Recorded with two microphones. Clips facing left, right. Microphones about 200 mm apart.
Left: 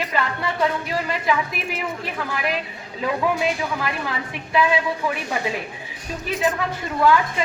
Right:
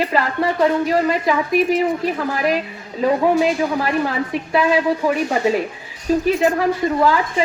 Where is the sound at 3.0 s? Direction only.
40° right (ahead or behind).